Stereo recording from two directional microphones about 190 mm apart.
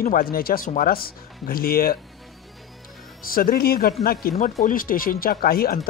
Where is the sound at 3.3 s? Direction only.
50° left (ahead or behind).